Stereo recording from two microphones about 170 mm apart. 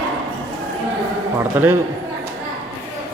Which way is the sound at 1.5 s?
10° right (ahead or behind).